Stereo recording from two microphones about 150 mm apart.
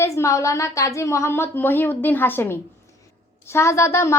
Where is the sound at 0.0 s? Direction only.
20° left (ahead or behind).